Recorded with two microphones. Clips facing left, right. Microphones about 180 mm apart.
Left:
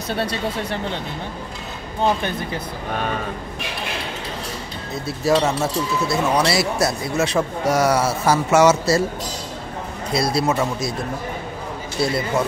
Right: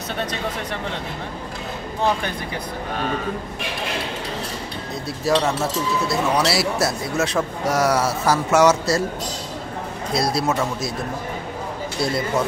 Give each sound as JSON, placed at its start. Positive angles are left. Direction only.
{"t": 0.2, "sound": "speech", "side_deg": 35}
{"t": 5.0, "sound": "speech", "side_deg": 0}
{"t": 10.1, "sound": "speech", "side_deg": 0}
{"t": 12.0, "sound": "speech", "side_deg": 0}